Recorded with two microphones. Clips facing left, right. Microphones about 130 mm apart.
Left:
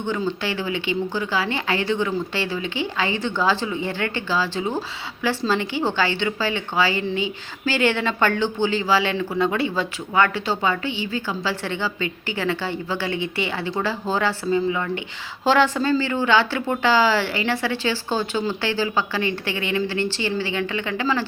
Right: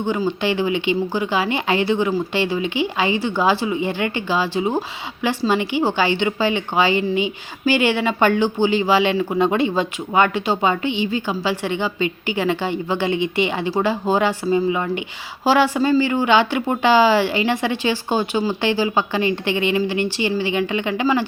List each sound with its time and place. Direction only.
0.0 s speech: 15° right (ahead or behind)